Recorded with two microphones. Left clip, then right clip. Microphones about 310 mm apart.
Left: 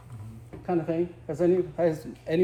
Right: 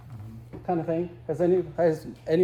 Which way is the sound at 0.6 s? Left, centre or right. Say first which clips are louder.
Even; right.